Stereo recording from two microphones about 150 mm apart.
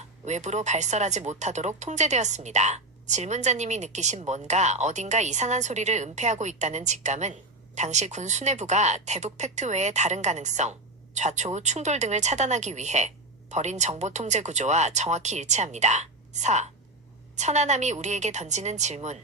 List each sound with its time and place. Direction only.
0.3 s speech: 50° right (ahead or behind)